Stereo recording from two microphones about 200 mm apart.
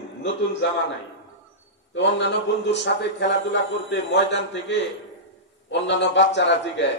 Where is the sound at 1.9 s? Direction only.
65° left (ahead or behind).